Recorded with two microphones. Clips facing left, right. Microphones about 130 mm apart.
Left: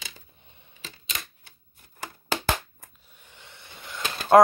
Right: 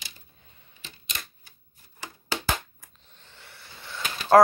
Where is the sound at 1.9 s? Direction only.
50° left (ahead or behind).